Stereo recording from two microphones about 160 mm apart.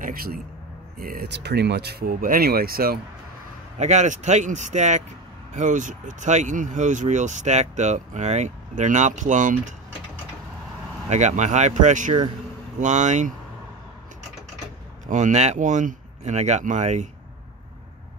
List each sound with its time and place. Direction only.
0.0 s a sound: 70° right (ahead or behind)
0.9 s speech: 65° right (ahead or behind)
3.7 s speech: 45° right (ahead or behind)
11.1 s speech: 50° right (ahead or behind)
15.0 s speech: 50° right (ahead or behind)